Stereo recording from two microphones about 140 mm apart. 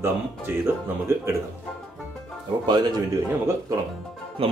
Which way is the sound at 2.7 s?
30° right (ahead or behind).